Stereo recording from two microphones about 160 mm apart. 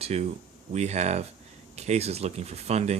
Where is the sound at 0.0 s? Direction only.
40° right (ahead or behind).